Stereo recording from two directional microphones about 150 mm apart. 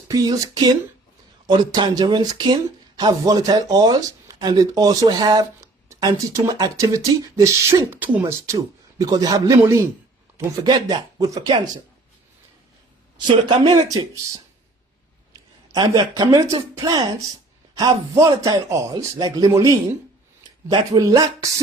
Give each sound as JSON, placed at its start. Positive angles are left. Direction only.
{"t": 0.1, "sound": "speech", "side_deg": -25}
{"t": 13.1, "sound": "speech", "side_deg": -30}
{"t": 15.7, "sound": "speech", "side_deg": -30}